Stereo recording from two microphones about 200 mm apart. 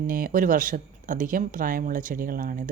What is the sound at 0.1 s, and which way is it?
Speech, 45° right (ahead or behind).